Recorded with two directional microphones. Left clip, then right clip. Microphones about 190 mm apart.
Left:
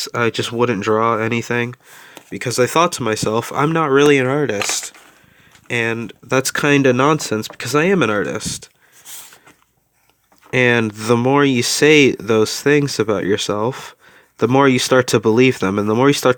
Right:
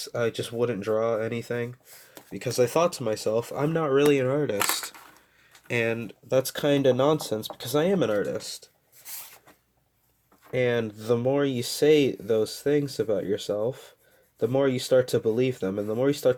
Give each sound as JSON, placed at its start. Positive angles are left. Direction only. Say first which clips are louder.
{"t": 0.0, "sound": "speech", "louder": "left 9 dB", "side_deg": 40}
{"t": 6.6, "sound": "speech", "louder": "left 9 dB", "side_deg": 45}
{"t": 10.5, "sound": "speech", "louder": "left 10 dB", "side_deg": 45}